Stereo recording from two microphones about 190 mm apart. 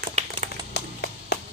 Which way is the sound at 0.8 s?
60° left (ahead or behind).